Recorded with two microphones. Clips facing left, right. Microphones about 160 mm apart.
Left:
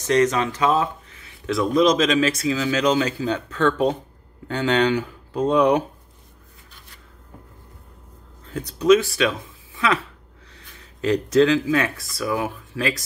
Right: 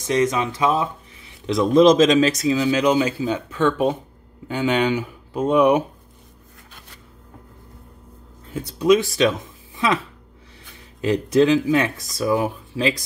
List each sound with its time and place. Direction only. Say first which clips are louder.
0.0 s speech: left 1 dB; 15° right (ahead or behind)
8.8 s speech: even; 15° right (ahead or behind)
11.0 s speech: even; 15° right (ahead or behind)